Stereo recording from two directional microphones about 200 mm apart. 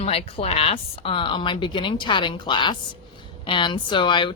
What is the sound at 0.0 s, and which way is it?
Speech, 30° left (ahead or behind).